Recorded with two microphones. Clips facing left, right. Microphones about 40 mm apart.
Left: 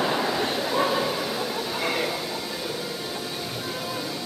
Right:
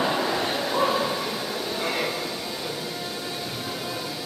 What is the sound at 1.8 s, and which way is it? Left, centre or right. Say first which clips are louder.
Train: left 1 dB; centre.